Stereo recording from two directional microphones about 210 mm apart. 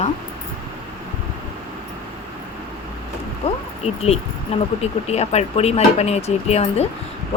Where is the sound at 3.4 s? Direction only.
30° left (ahead or behind).